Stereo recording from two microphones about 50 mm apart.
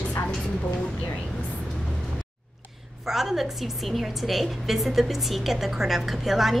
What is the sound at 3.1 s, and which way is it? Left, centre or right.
A woman's voice, centre.